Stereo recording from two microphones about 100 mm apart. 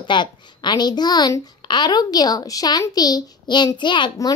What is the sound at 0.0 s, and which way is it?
A child's voice, 50° left (ahead or behind).